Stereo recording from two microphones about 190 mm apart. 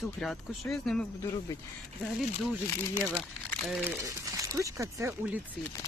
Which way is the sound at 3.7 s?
5° right (ahead or behind).